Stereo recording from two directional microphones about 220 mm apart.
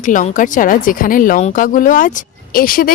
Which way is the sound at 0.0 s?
35° left (ahead or behind).